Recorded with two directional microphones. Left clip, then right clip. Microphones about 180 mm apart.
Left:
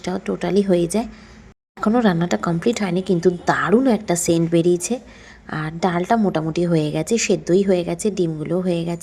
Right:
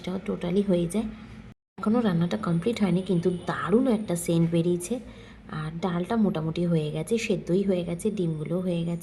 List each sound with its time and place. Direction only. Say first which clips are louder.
0.0 s a woman's voice: left 8 dB; 20° left (ahead or behind)